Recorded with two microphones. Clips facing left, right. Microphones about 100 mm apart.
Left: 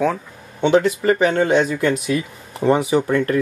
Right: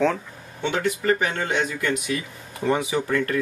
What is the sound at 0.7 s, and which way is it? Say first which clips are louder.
Speech: left 6 dB; 25° left (ahead or behind).